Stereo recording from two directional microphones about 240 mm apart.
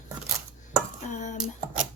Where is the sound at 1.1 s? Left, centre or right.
Left.